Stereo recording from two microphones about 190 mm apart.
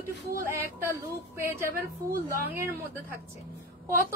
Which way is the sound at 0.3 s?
15° right (ahead or behind).